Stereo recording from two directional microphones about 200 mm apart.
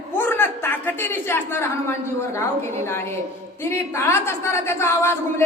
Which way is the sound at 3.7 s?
10° left (ahead or behind).